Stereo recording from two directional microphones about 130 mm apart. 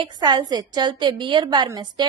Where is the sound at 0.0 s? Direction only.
35° right (ahead or behind).